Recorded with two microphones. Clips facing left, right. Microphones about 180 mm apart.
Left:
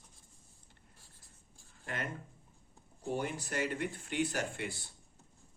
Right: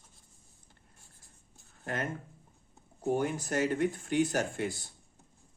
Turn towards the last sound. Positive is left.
turn(degrees=-45)  # may be behind; listen again after turning